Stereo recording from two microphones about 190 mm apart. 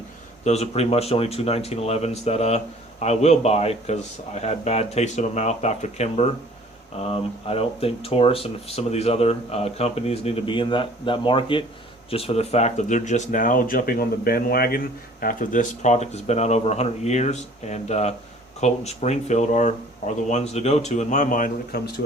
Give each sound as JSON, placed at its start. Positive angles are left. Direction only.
{"t": 0.4, "sound": "speech", "side_deg": 35}